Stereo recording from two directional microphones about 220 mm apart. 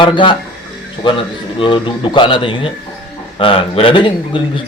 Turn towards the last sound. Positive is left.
turn(degrees=20)  # may be behind; listen again after turning